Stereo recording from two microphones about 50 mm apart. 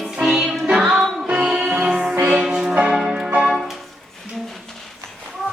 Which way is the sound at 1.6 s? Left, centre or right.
Right.